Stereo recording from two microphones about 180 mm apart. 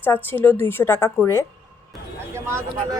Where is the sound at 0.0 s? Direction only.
10° left (ahead or behind).